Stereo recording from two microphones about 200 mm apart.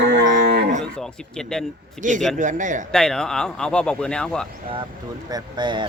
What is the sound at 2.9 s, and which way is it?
Speech, 5° left (ahead or behind).